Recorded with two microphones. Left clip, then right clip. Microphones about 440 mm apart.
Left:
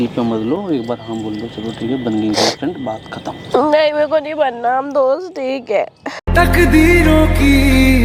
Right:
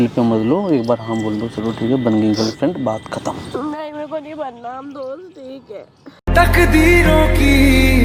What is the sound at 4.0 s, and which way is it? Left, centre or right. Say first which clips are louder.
Speech: left 11 dB; left.